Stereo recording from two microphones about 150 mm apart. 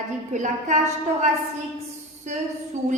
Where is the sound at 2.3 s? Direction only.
50° right (ahead or behind).